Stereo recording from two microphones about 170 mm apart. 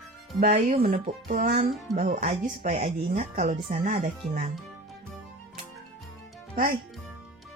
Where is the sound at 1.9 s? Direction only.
45° right (ahead or behind).